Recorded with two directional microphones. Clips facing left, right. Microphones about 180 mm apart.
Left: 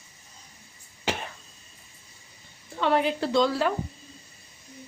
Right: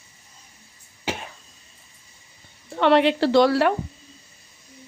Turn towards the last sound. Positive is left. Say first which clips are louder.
# right 6 dB
turn(degrees=-70)  # may be behind; listen again after turning